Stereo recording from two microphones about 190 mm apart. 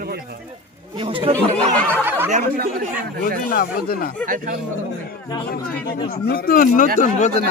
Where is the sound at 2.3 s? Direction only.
40° right (ahead or behind).